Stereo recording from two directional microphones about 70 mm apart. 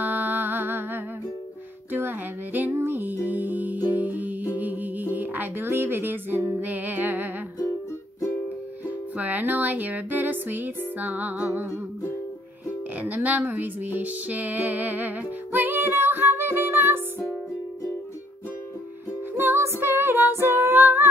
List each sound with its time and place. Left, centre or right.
0.0 s music: right
8.8 s music: right
12.9 s music: right
19.3 s music: right